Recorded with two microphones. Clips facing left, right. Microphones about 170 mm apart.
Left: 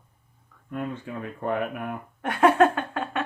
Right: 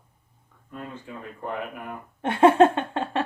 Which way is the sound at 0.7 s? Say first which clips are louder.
Left 6 dB; 65° left (ahead or behind).